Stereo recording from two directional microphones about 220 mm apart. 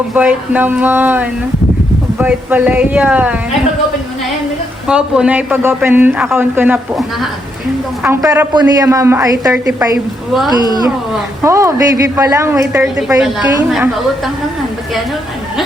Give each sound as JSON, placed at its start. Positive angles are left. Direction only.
{"t": 0.1, "sound": "a man's voice", "side_deg": -5}
{"t": 4.9, "sound": "a man's voice", "side_deg": -5}
{"t": 11.4, "sound": "a man's voice", "side_deg": -15}
{"t": 13.7, "sound": "a woman's voice", "side_deg": 0}